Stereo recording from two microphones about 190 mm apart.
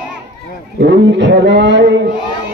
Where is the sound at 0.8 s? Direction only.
70° right (ahead or behind).